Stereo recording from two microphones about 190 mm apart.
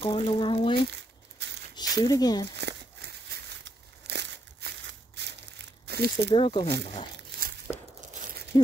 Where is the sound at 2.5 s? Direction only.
65° right (ahead or behind).